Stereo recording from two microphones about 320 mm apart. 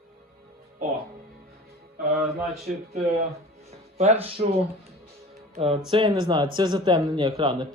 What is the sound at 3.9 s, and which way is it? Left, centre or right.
Speech, centre.